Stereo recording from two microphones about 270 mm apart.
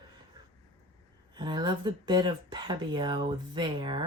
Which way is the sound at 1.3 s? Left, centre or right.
Centre.